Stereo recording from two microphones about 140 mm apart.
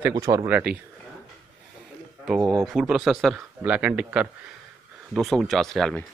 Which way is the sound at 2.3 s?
5° right (ahead or behind).